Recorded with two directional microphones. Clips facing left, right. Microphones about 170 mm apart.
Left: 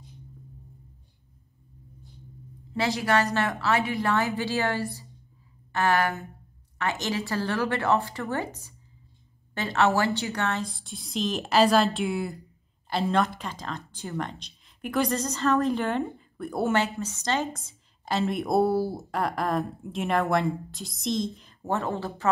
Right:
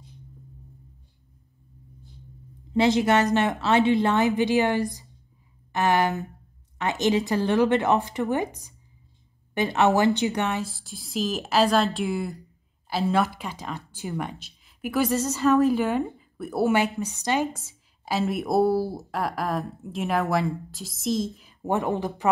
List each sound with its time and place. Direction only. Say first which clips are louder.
2.7 s a woman's voice: right 5 dB; 20° right (ahead or behind)
10.6 s a woman's voice: right 1 dB; 5° right (ahead or behind)